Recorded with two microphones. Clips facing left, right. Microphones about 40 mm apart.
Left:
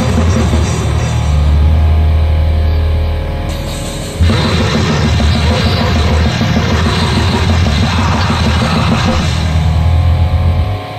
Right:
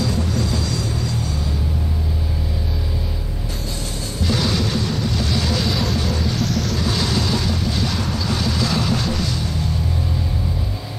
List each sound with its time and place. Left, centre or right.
0.0 s music: left
4.3 s music: left